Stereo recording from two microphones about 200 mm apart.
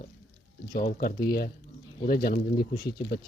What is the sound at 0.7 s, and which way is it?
Speech, 45° left (ahead or behind).